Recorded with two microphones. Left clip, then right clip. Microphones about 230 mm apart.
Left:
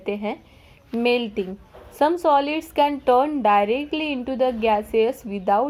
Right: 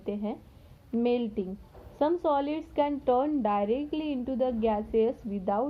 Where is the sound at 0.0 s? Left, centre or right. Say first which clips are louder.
Left 8 dB; left.